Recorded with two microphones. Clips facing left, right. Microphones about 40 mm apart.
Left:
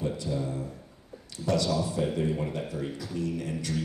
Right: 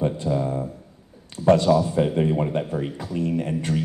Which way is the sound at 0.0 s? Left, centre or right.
Right.